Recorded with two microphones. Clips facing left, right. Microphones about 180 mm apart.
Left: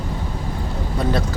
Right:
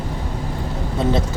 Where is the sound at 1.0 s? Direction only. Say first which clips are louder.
Right 2 dB; 20° right (ahead or behind).